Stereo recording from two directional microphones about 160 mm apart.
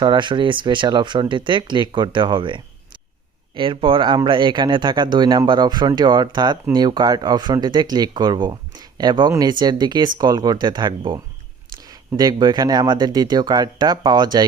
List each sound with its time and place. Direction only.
0.0 s speech: 30° right (ahead or behind)